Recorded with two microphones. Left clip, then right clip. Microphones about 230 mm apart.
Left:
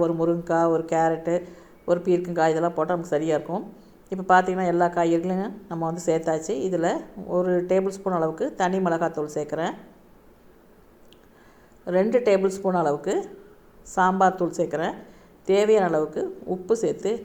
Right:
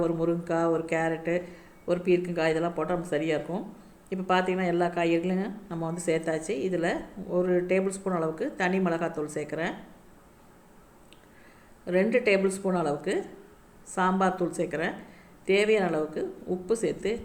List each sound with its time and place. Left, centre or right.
0.0 s a woman's voice: centre
11.9 s a woman's voice: centre